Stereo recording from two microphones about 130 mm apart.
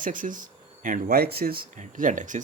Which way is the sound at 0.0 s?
90° right.